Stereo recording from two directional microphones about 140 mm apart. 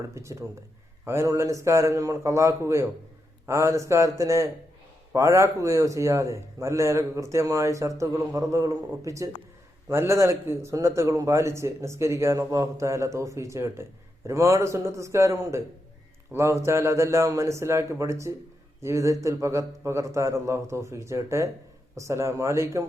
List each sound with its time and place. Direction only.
0.1 s speech: 20° right (ahead or behind)